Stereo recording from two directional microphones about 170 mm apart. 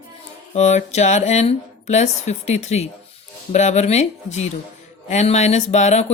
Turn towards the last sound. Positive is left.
turn(degrees=40)  # may be behind; listen again after turning